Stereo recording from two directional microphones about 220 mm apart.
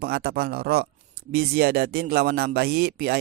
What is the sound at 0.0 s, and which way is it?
A man's voice, 45° right (ahead or behind).